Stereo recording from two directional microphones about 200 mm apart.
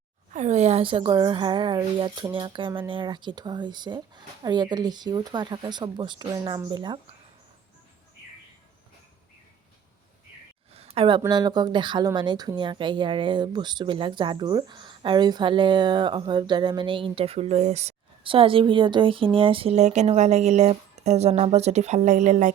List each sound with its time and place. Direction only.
0.3 s speech: 35° right (ahead or behind)
10.8 s a sound: 30° right (ahead or behind)
11.2 s speech: 20° right (ahead or behind); by 22.5 s 35° right (ahead or behind)